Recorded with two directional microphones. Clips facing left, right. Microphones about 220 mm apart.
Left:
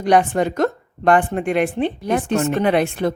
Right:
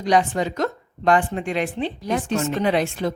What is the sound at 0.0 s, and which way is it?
A woman's voice, 55° left (ahead or behind).